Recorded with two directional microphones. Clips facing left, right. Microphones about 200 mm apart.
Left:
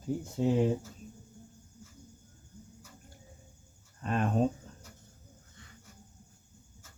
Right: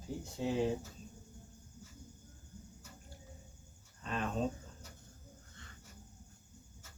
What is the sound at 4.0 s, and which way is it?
Speech, 55° left (ahead or behind).